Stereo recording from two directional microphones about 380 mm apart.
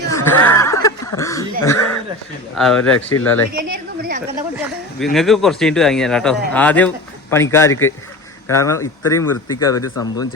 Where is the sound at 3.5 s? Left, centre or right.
Right.